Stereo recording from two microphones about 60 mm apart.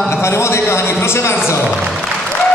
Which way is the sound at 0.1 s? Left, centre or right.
Left.